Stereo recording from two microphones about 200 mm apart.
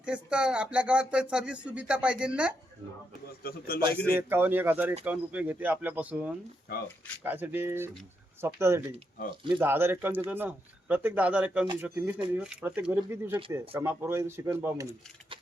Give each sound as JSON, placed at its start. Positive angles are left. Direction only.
{"t": 0.0, "sound": "speech", "side_deg": -5}
{"t": 3.7, "sound": "speech", "side_deg": 50}
{"t": 4.2, "sound": "speech", "side_deg": -10}
{"t": 6.7, "sound": "speech", "side_deg": 50}
{"t": 7.3, "sound": "speech", "side_deg": -10}